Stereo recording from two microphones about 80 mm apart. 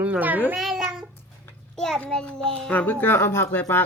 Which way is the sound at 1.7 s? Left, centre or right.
Centre.